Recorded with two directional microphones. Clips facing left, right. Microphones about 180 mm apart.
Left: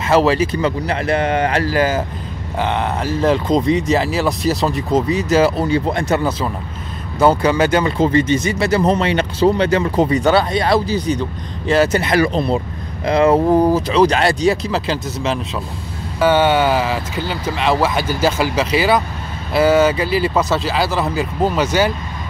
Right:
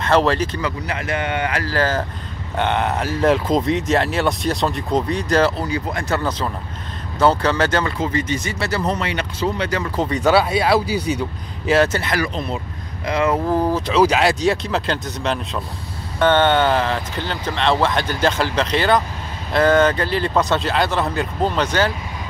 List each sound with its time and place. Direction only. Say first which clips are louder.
0.0 s speech: left 3 dB; 5° left (ahead or behind)
0.6 s speech: left 6 dB; 30° left (ahead or behind)
1.7 s speech: left 3 dB; 10° left (ahead or behind)
2.5 s speech: even; centre (ahead or behind)
5.6 s speech: left 6 dB; 25° left (ahead or behind)
7.2 s speech: left 3 dB; 10° left (ahead or behind)
8.0 s speech: left 7 dB; 25° left (ahead or behind)
10.0 s speech: left 2 dB; centre (ahead or behind)
11.9 s speech: left 6 dB; 20° left (ahead or behind)
12.3 s speech: left 8 dB; 35° left (ahead or behind)
13.5 s speech: left 6 dB; 15° left (ahead or behind)
13.8 s speech: left 2 dB; 5° right (ahead or behind)